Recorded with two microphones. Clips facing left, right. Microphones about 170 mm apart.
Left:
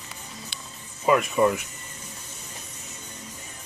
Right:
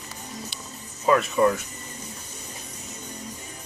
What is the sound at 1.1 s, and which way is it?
Speech, 15° left (ahead or behind).